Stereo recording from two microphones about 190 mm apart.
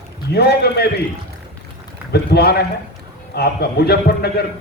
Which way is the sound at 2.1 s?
55° left (ahead or behind).